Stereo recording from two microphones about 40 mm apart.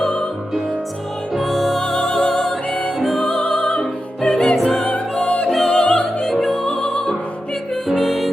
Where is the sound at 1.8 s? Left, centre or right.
Centre.